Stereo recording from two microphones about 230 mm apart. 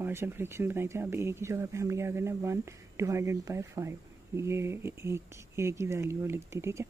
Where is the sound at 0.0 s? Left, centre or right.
Centre.